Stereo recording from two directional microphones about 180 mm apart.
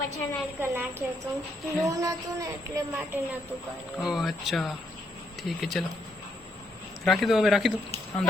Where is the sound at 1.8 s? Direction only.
20° right (ahead or behind).